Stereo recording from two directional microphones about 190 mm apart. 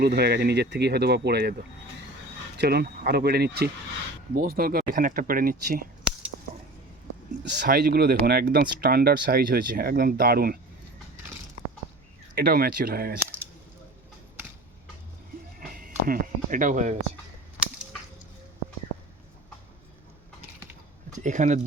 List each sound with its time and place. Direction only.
0.0 s speech: 55° right (ahead or behind)
2.6 s speech: 55° right (ahead or behind)
7.5 s speech: 60° right (ahead or behind)
12.3 s speech: 55° right (ahead or behind)
13.1 s a sound: 10° right (ahead or behind)
16.0 s speech: 45° right (ahead or behind)
21.2 s speech: 40° right (ahead or behind)